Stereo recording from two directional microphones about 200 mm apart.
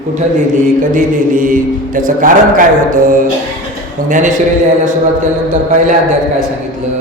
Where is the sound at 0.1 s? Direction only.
40° right (ahead or behind).